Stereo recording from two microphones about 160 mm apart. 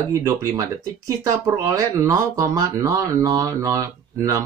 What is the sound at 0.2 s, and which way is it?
Speech, 20° right (ahead or behind).